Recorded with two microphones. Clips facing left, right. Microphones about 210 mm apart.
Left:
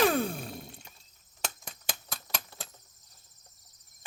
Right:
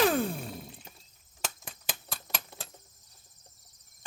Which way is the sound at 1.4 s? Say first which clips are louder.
Even; centre (ahead or behind).